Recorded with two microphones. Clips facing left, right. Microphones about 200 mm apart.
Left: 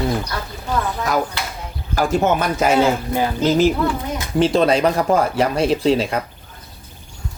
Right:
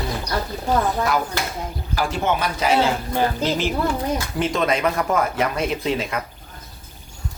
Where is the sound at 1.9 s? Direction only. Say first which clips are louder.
Left 5 dB; 45° left (ahead or behind).